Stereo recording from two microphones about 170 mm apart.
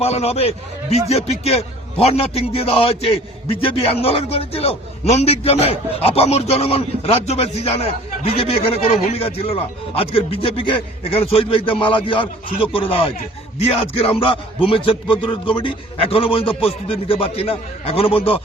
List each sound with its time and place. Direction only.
0.0 s a man's voice: 40° left (ahead or behind)